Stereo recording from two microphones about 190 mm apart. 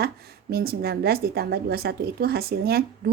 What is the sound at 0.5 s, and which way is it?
Speech, 55° right (ahead or behind).